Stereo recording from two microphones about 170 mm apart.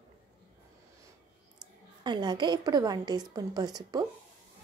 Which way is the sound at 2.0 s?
25° right (ahead or behind).